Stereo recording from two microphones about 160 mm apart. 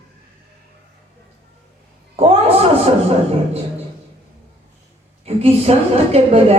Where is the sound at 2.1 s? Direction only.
40° right (ahead or behind).